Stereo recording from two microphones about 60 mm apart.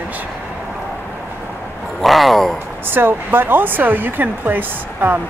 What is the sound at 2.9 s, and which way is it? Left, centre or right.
Speech, right.